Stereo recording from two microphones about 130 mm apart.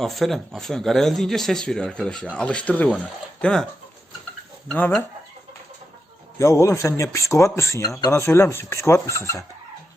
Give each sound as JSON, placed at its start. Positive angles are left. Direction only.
{"t": 0.0, "sound": "speech", "side_deg": 0}
{"t": 4.7, "sound": "speech", "side_deg": 10}
{"t": 6.4, "sound": "speech", "side_deg": 20}